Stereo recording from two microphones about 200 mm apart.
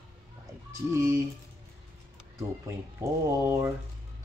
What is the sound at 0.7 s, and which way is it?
Speech, 15° right (ahead or behind).